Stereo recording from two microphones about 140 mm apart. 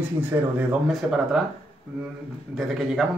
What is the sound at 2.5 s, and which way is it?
Speech, centre (ahead or behind).